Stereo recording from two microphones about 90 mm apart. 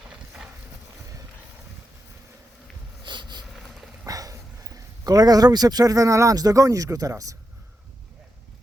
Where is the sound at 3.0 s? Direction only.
55° right (ahead or behind).